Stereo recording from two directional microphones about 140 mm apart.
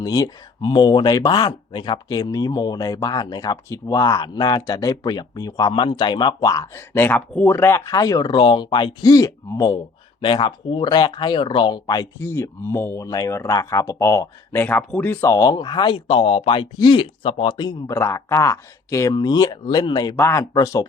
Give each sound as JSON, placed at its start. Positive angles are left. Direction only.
{"t": 0.0, "sound": "speech", "side_deg": 25}
{"t": 20.1, "sound": "speech", "side_deg": 20}